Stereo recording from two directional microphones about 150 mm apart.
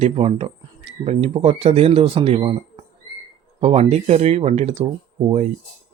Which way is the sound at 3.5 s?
45° right (ahead or behind).